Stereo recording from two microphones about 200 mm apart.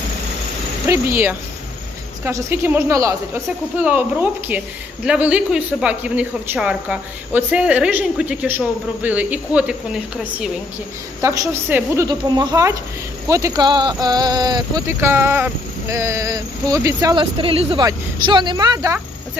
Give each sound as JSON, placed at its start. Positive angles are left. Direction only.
{"t": 0.9, "sound": "a woman's voice", "side_deg": -10}
{"t": 11.2, "sound": "speech", "side_deg": -15}